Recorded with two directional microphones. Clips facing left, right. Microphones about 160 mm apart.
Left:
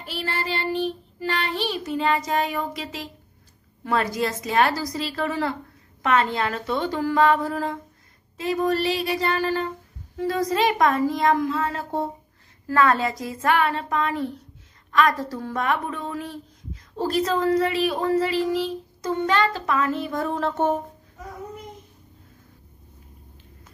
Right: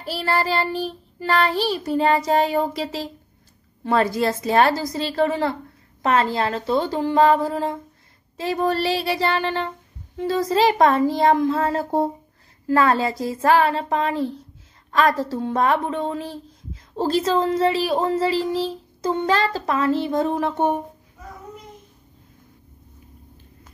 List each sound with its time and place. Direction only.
0.0 s child singing: 40° right (ahead or behind)
3.8 s speech: 30° right (ahead or behind)
6.0 s child singing: 35° right (ahead or behind)
10.1 s a woman's voice: 30° right (ahead or behind)
10.5 s child singing: 30° right (ahead or behind)
12.6 s speech: 30° right (ahead or behind)
14.9 s child singing: 30° right (ahead or behind)
16.9 s speech: 30° right (ahead or behind); by 20.8 s 15° right (ahead or behind)